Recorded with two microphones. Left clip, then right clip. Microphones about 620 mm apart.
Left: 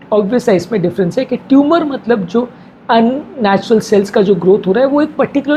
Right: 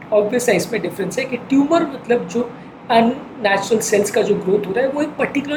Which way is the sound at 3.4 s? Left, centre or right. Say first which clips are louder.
Left 4 dB; left.